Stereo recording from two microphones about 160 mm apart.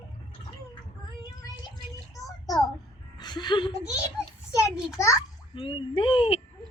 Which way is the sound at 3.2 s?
25° left (ahead or behind).